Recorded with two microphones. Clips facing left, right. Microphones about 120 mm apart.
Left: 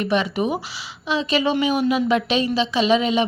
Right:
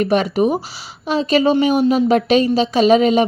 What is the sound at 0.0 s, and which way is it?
A woman's voice, 45° right (ahead or behind).